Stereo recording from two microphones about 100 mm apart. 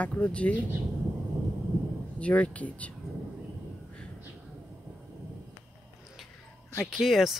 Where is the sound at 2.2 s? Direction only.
10° left (ahead or behind).